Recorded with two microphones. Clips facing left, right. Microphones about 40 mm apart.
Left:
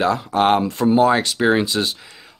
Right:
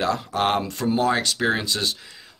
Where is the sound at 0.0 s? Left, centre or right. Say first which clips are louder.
Left 5 dB; centre.